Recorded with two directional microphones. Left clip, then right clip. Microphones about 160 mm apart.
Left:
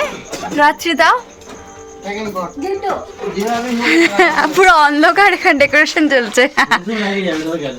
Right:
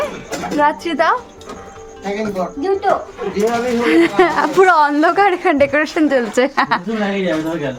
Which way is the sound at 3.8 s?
10° right (ahead or behind).